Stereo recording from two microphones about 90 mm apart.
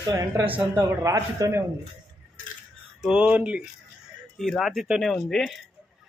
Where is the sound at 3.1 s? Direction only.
15° right (ahead or behind).